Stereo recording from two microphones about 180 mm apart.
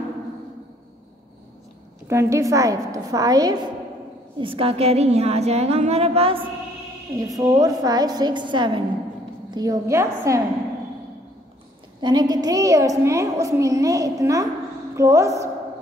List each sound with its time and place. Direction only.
2.0 s a woman's voice: 15° right (ahead or behind); by 6.4 s 35° right (ahead or behind)
7.2 s a woman's voice: 20° right (ahead or behind)
12.0 s a woman's voice: 25° right (ahead or behind)